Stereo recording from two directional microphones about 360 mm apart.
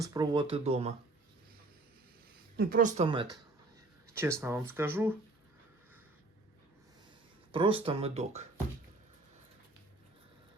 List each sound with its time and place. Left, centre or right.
0.0 s speech: centre
2.6 s speech: right; by 5.1 s centre
7.5 s speech: centre